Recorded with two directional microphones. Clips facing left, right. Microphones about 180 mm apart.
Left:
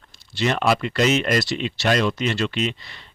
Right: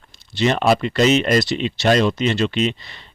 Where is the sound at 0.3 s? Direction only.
20° right (ahead or behind).